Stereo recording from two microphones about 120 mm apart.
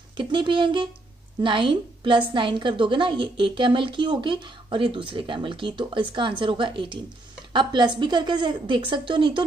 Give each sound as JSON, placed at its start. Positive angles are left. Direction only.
{"t": 0.2, "sound": "a woman's voice", "side_deg": -45}